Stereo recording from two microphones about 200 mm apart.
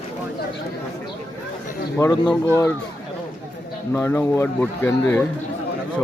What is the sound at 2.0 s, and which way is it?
Speech, 15° left (ahead or behind).